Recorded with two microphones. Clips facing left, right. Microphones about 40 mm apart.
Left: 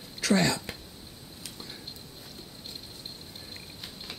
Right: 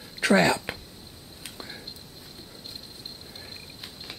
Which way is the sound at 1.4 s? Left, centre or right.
Right.